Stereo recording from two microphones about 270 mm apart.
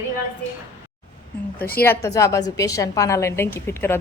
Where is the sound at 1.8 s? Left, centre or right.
Centre.